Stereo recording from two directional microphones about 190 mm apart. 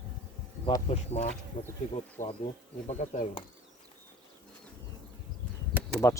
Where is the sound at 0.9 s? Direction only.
35° left (ahead or behind).